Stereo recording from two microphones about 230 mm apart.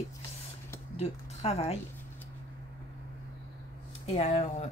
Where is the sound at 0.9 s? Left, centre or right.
Left.